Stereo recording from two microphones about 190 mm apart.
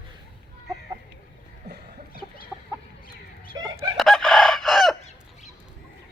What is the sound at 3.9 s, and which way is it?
Chicken, centre (ahead or behind).